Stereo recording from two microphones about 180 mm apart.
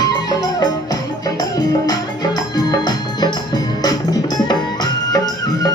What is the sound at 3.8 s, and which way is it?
Music, 20° left (ahead or behind).